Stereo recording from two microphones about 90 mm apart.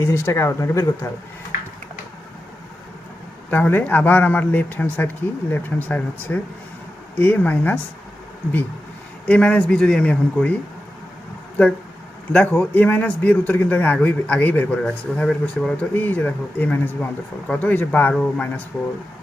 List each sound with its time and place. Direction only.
0.0 s speech: 30° left (ahead or behind)
3.5 s a man's voice: 20° left (ahead or behind)
9.2 s a man's voice: 15° left (ahead or behind)
11.6 s a man's voice: 20° left (ahead or behind)
16.0 s a man's voice: 20° left (ahead or behind)